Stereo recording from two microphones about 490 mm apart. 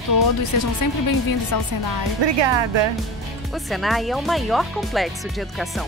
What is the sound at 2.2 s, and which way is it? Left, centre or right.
Speech, right.